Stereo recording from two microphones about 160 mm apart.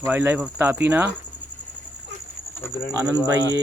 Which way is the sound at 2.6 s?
15° left (ahead or behind).